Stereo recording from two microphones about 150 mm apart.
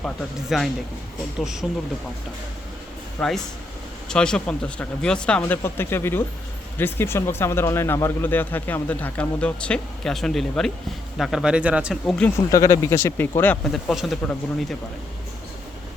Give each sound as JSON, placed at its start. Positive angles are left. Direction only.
{"t": 0.0, "sound": "speech", "side_deg": 0}
{"t": 3.2, "sound": "speech", "side_deg": 5}
{"t": 12.0, "sound": "speech", "side_deg": 5}
{"t": 12.5, "sound": "speech", "side_deg": 25}
{"t": 13.7, "sound": "speech", "side_deg": 0}